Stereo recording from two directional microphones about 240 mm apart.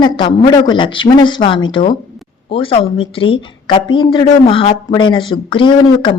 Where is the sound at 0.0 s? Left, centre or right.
Centre.